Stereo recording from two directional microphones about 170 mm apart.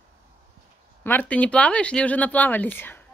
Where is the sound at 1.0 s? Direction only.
10° left (ahead or behind).